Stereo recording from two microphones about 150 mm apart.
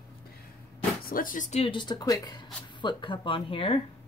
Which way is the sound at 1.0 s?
70° left (ahead or behind).